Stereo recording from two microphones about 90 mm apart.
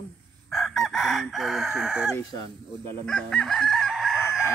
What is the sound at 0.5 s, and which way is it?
Chicken, centre (ahead or behind).